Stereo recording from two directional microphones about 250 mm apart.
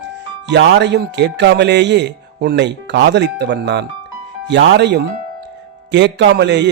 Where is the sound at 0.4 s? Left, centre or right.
Right.